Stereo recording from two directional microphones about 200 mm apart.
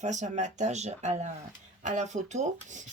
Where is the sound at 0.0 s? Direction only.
35° right (ahead or behind).